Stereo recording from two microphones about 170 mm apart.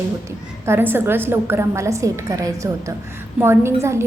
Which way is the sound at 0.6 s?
15° right (ahead or behind).